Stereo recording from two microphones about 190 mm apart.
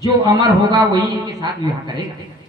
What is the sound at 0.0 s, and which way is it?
A man's voice, 20° right (ahead or behind).